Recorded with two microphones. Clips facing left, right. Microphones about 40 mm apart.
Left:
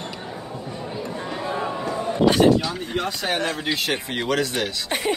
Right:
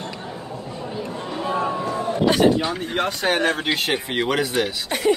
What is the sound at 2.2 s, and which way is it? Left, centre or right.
Speech, centre.